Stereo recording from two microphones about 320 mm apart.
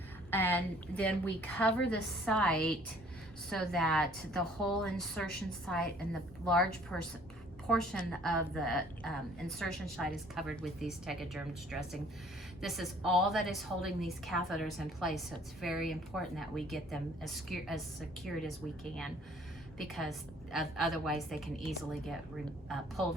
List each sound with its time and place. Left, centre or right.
0.3 s a woman's voice: centre
6.9 s a woman's voice: centre
19.8 s a woman's voice: centre